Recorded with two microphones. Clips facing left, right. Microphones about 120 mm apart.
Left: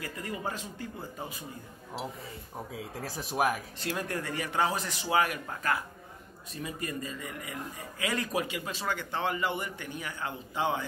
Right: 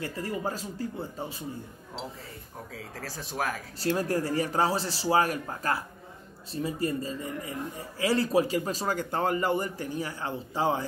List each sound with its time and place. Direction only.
0.0 s speech: 30° right (ahead or behind)
2.7 s speech: 20° left (ahead or behind)
3.8 s speech: 35° right (ahead or behind)